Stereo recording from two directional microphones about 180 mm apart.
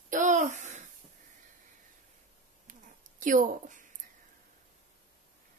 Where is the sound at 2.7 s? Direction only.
45° right (ahead or behind).